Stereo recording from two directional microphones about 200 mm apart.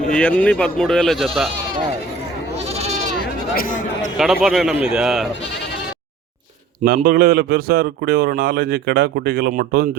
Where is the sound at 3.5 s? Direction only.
40° left (ahead or behind).